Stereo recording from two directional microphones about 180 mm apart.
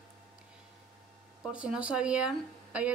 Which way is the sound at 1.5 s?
5° right (ahead or behind).